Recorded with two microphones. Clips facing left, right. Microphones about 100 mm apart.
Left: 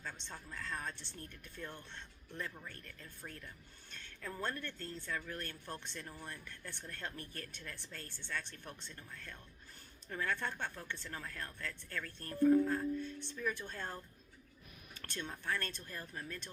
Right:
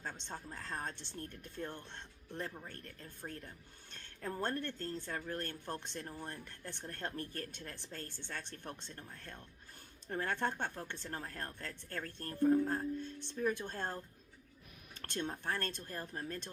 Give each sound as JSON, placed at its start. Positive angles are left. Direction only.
{"t": 0.0, "sound": "speech", "side_deg": -45}
{"t": 2.6, "sound": "speech", "side_deg": -40}
{"t": 15.1, "sound": "speech", "side_deg": -50}